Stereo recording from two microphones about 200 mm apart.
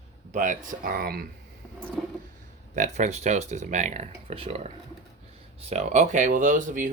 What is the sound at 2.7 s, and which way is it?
Speech, 35° right (ahead or behind).